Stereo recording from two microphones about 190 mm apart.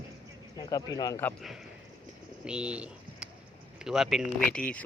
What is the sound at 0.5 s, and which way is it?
Speech, 20° left (ahead or behind).